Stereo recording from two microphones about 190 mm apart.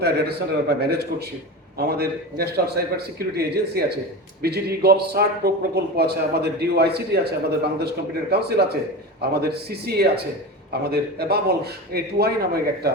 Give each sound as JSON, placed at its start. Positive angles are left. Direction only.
{"t": 0.0, "sound": "a man's voice", "side_deg": -55}